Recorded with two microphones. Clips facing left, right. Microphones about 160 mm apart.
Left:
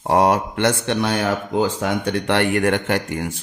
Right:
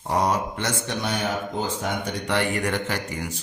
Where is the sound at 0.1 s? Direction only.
65° left (ahead or behind).